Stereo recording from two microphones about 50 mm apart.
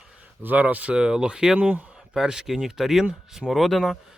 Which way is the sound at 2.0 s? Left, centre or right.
Centre.